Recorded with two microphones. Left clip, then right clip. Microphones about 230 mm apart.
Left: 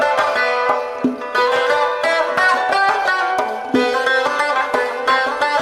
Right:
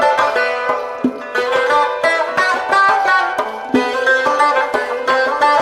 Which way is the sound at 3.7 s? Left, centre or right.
Left.